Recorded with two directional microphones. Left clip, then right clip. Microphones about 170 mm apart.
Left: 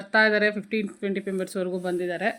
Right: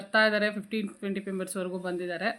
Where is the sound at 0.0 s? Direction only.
15° left (ahead or behind).